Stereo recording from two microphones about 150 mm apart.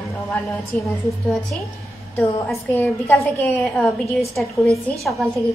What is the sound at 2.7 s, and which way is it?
A woman's voice, 15° left (ahead or behind).